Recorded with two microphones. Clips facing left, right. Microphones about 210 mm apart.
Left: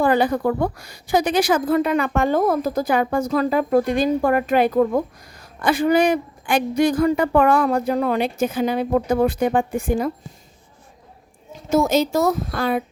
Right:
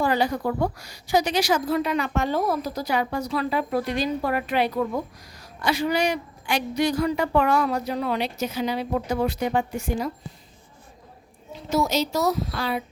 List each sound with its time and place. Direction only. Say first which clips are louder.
0.0 s a woman's voice: left 5 dB; 55° left (ahead or behind)
11.5 s a woman's voice: left 6 dB; 50° left (ahead or behind)